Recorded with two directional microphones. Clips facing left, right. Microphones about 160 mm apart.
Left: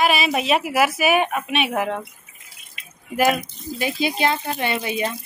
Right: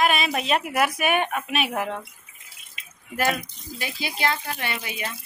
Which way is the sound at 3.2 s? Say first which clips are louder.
Left 6 dB; 15° left (ahead or behind).